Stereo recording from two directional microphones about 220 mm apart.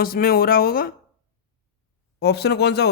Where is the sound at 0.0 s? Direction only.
40° left (ahead or behind).